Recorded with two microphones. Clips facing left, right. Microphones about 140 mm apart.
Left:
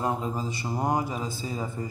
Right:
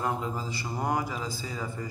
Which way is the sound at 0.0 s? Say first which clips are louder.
Left 2 dB; 20° left (ahead or behind).